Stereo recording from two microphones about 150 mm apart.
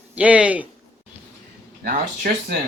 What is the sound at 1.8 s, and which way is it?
Speech, 70° right (ahead or behind).